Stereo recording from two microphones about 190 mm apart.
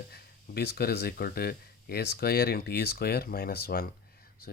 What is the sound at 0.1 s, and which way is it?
Speech, 55° left (ahead or behind).